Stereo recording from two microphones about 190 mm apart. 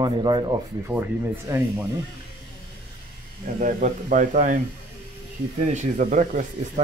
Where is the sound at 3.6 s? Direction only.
45° right (ahead or behind).